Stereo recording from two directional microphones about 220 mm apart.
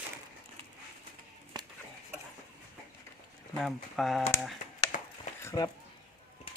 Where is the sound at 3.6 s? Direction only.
Centre (ahead or behind).